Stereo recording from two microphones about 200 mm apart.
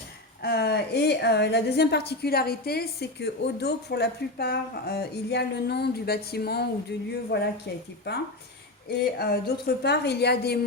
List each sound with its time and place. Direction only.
0.4 s a woman's voice: 55° left (ahead or behind)